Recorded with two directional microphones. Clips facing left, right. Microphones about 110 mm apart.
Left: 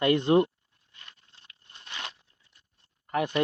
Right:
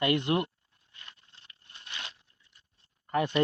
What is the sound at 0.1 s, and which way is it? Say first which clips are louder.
Speech: left 6 dB; 30° left (ahead or behind).